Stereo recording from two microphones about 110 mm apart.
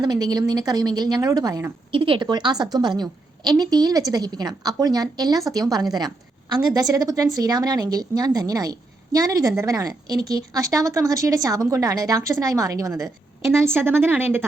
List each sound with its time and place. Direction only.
0.0 s a woman's voice: 40° right (ahead or behind)
1.9 s a woman's voice: 50° right (ahead or behind); by 12.9 s 30° right (ahead or behind)
13.6 s speech: 20° right (ahead or behind)